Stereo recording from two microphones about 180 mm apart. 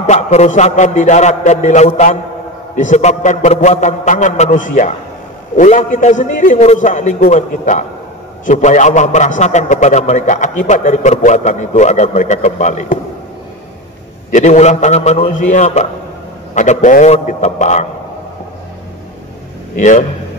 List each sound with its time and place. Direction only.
0.0 s a man's voice: 40° left (ahead or behind)
14.3 s a man's voice: 40° left (ahead or behind)
15.1 s a man's voice: 50° left (ahead or behind)
19.8 s a man's voice: 45° left (ahead or behind)